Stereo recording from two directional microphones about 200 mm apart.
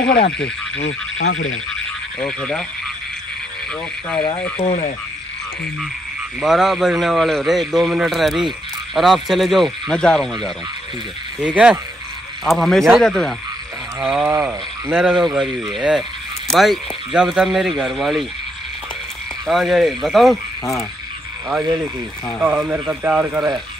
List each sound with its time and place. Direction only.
0.4 s speech: 65° left (ahead or behind); by 1.6 s 90° left
2.1 s a man's voice: 5° left (ahead or behind)
4.2 s speech: 30° left (ahead or behind)
6.4 s a man's voice: centre (ahead or behind)
11.5 s a man's voice: 5° right (ahead or behind)
19.4 s a man's voice: centre (ahead or behind)
22.4 s speech: 10° right (ahead or behind)